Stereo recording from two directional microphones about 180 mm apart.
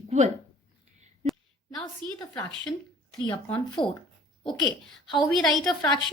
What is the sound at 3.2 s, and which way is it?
Speech, 25° left (ahead or behind).